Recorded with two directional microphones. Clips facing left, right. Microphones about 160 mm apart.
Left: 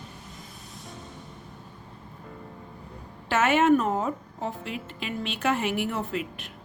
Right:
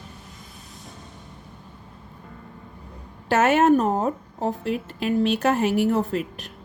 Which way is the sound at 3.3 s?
40° right (ahead or behind).